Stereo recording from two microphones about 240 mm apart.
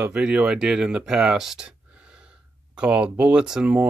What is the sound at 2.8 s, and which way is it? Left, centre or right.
Speech, centre.